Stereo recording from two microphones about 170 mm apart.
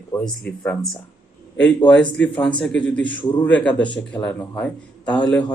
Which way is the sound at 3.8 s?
30° left (ahead or behind).